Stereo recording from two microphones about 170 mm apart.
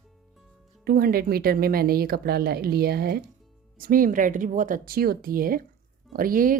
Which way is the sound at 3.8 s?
55° right (ahead or behind).